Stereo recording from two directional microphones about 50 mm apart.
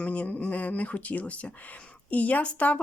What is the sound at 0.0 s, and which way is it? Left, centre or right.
A woman's voice, left.